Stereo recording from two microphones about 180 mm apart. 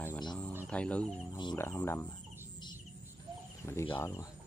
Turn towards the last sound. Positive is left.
turn(degrees=15)  # may be behind; listen again after turning